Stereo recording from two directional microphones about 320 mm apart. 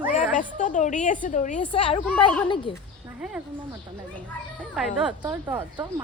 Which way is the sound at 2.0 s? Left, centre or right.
Centre.